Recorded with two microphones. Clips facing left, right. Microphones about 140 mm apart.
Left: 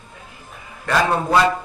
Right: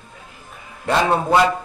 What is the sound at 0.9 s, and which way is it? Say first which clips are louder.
Speech: right 1 dB; 25° right (ahead or behind).